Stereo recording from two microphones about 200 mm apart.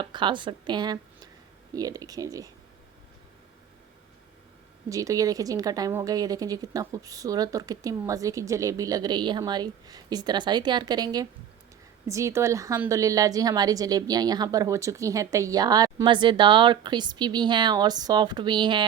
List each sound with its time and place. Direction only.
0.0 s speech: 25° right (ahead or behind)
4.9 s a woman's voice: 15° right (ahead or behind)